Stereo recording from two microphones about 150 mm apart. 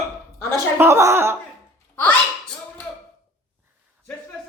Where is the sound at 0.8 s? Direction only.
15° right (ahead or behind).